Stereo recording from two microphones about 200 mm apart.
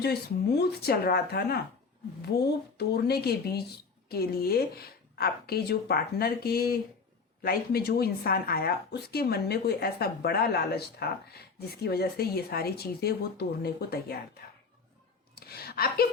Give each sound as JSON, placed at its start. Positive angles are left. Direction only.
{"t": 0.6, "sound": "speech", "side_deg": 50}
{"t": 15.4, "sound": "speech", "side_deg": 50}